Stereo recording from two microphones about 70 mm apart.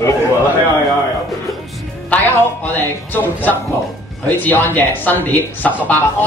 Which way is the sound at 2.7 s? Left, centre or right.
Left.